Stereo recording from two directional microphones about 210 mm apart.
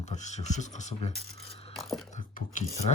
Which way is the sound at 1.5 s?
30° left (ahead or behind).